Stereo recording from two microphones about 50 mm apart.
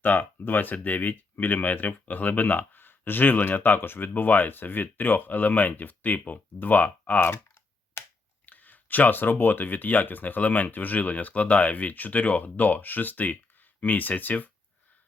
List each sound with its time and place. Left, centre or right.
0.0 s speech: left
8.4 s speech: left